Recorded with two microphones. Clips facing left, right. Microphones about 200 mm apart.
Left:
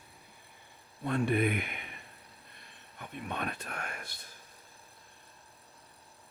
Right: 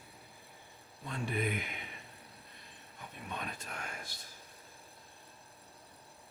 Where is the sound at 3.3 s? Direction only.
65° left (ahead or behind).